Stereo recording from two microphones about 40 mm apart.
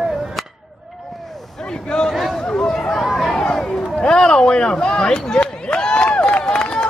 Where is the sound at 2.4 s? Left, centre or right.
Left.